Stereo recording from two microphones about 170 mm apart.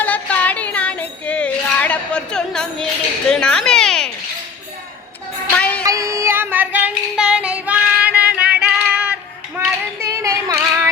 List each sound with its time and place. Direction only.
0.0 s music: 10° left (ahead or behind)
5.5 s music: 10° left (ahead or behind)
5.8 s female singing: 20° right (ahead or behind)
9.6 s child singing: 15° right (ahead or behind)